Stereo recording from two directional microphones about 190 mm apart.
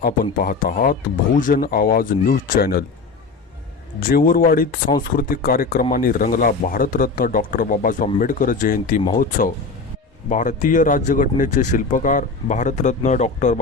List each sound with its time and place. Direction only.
0.0 s speech: 45° left (ahead or behind)
4.0 s speech: 50° left (ahead or behind)
10.2 s speech: 40° left (ahead or behind)